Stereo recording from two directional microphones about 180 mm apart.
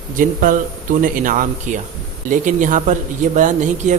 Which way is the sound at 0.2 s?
50° right (ahead or behind).